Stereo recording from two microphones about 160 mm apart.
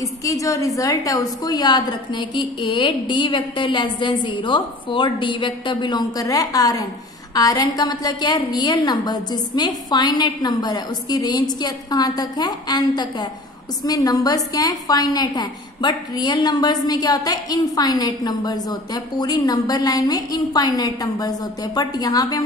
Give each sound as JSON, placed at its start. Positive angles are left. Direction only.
{"t": 0.0, "sound": "a woman's voice", "side_deg": 20}